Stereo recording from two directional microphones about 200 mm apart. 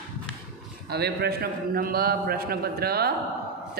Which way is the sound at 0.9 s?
50° right (ahead or behind).